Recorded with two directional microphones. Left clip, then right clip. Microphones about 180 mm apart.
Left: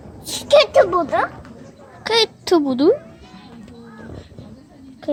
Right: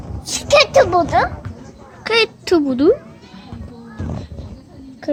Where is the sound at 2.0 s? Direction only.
10° left (ahead or behind).